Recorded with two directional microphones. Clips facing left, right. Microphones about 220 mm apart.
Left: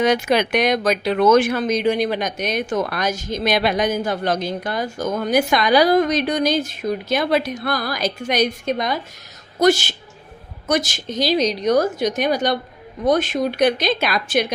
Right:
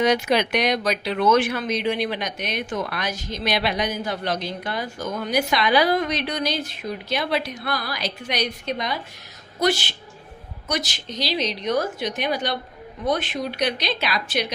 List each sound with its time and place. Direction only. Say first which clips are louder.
0.0 s speech: left 2 dB; 50° left (ahead or behind)